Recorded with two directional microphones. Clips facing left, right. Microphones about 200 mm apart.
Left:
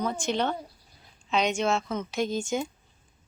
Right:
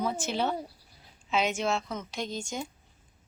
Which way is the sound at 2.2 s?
50° left (ahead or behind).